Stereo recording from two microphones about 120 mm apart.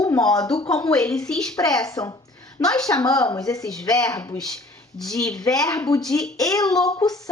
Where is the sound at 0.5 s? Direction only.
5° left (ahead or behind).